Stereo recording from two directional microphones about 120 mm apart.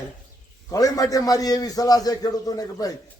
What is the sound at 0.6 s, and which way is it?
A man's voice, 30° left (ahead or behind).